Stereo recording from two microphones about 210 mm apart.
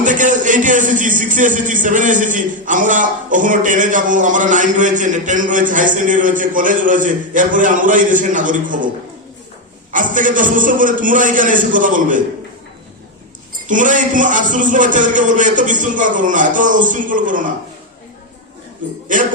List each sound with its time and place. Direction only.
0.0 s a man's voice: 35° right (ahead or behind)
9.9 s a man's voice: 40° right (ahead or behind)
13.7 s a man's voice: 40° right (ahead or behind)
19.0 s a man's voice: 40° right (ahead or behind)